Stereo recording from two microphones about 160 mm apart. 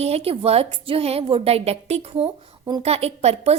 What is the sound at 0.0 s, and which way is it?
A woman's voice, 40° right (ahead or behind).